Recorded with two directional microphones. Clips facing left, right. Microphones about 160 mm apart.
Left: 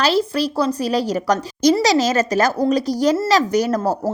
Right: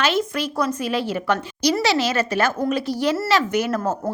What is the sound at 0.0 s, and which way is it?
A woman's voice, 35° left (ahead or behind).